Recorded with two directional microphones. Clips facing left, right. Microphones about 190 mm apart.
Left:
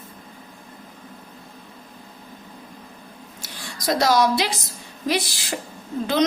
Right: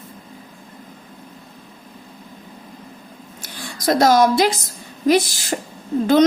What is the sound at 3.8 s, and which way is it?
A woman's voice, 50° right (ahead or behind).